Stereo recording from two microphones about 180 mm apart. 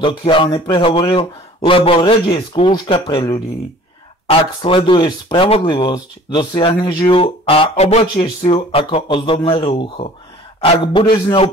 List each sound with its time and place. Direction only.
0.0 s speech: 30° left (ahead or behind)